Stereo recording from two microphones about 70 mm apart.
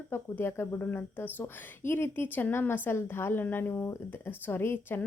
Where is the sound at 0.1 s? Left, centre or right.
Left.